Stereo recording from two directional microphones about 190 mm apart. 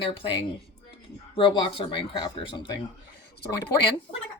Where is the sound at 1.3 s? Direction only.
25° left (ahead or behind).